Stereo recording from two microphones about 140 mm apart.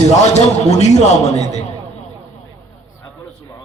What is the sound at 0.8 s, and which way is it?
Speech, 50° left (ahead or behind).